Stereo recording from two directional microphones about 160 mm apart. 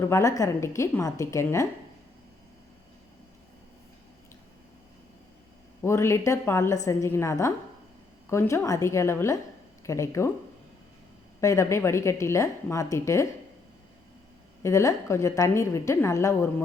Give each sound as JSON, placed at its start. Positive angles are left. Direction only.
{"t": 0.0, "sound": "a woman's voice", "side_deg": 20}
{"t": 5.8, "sound": "a woman's voice", "side_deg": 15}
{"t": 11.3, "sound": "a woman's voice", "side_deg": 20}
{"t": 14.6, "sound": "a woman's voice", "side_deg": 20}